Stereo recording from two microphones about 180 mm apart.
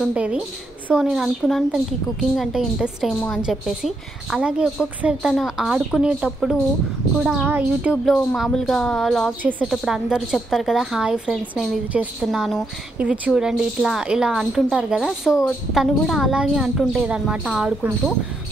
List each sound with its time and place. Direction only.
0.0 s a woman's voice: 5° right (ahead or behind)